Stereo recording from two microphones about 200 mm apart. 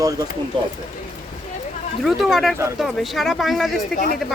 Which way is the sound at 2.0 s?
Centre (ahead or behind).